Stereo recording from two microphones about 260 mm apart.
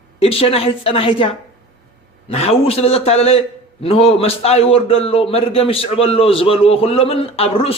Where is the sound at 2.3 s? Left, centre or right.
Left.